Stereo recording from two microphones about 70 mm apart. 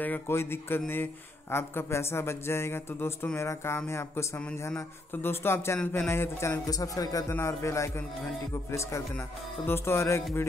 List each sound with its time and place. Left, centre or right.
0.3 s speech: left
6.7 s speech: left
7.3 s speech: left
9.7 s speech: left